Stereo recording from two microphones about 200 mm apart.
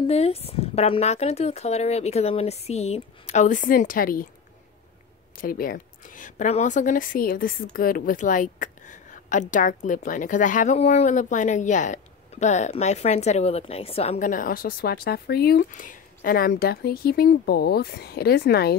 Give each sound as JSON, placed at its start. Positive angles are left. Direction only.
{"t": 0.0, "sound": "speech", "side_deg": 30}
{"t": 5.4, "sound": "speech", "side_deg": 45}